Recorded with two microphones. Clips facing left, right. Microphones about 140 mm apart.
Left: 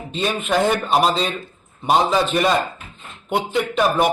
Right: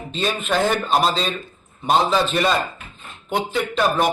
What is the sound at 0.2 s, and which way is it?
A man's voice, 10° left (ahead or behind).